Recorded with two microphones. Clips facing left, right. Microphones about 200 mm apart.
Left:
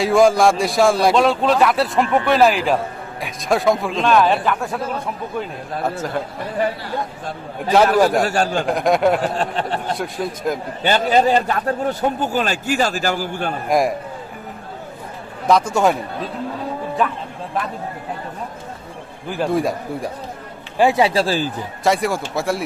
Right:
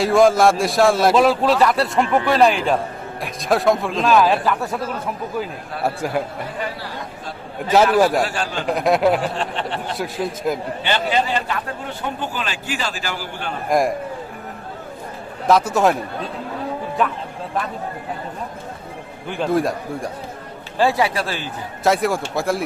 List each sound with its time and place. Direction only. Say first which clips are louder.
0.0 s a man's voice: even; centre (ahead or behind)
5.8 s a man's voice: right 2 dB; 10° right (ahead or behind)
7.9 s a man's voice: left 1 dB; 5° right (ahead or behind)
8.2 s a man's voice: left 4 dB; 45° left (ahead or behind)
8.6 s a man's voice: right 3 dB; centre (ahead or behind)
9.2 s a man's voice: left 3 dB; 45° left (ahead or behind)
10.0 s a man's voice: even; 5° right (ahead or behind)
10.8 s a man's voice: left 6 dB; 45° left (ahead or behind)
13.7 s a man's voice: even; centre (ahead or behind)
15.4 s a man's voice: even; 5° right (ahead or behind)
19.3 s a man's voice: even; centre (ahead or behind)
20.7 s speech: left 3 dB; 20° left (ahead or behind)
21.8 s a man's voice: even; centre (ahead or behind)